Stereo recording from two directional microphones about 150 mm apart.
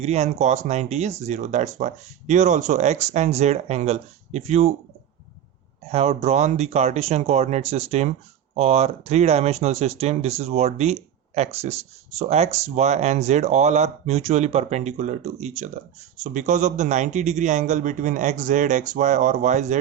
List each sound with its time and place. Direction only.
0.0 s speech: 45° right (ahead or behind)
5.8 s speech: 45° right (ahead or behind)